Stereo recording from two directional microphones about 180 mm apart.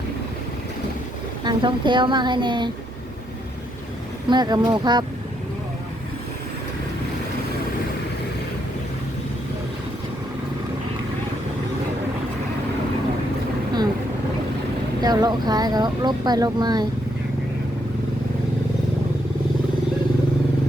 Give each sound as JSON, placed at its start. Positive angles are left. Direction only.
{"t": 1.5, "sound": "speech", "side_deg": -25}
{"t": 4.3, "sound": "speech", "side_deg": -25}
{"t": 15.0, "sound": "speech", "side_deg": -20}